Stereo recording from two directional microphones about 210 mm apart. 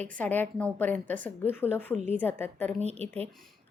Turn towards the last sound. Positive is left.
turn(degrees=-30)  # may be behind; listen again after turning